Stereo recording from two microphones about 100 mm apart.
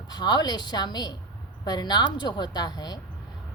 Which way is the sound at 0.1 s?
45° left (ahead or behind).